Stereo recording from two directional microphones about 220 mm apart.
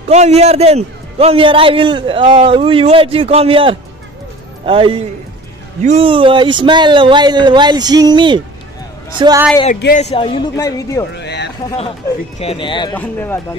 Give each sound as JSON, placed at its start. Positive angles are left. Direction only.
{"t": 0.1, "sound": "a man's voice", "side_deg": -30}
{"t": 9.9, "sound": "a man's voice", "side_deg": 25}
{"t": 11.1, "sound": "speech", "side_deg": 50}
{"t": 12.4, "sound": "a man's voice", "side_deg": 25}
{"t": 12.9, "sound": "speech", "side_deg": 10}